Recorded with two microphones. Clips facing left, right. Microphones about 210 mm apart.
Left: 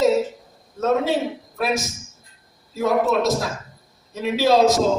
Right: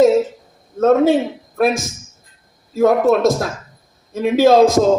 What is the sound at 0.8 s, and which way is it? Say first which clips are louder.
A man's voice: right 7 dB; 50° right (ahead or behind).